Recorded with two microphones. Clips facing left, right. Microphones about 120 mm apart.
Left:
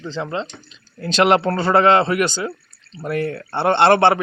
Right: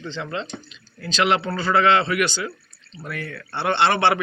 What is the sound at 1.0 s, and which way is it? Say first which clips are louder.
A man's voice: left 5 dB; 50° left (ahead or behind).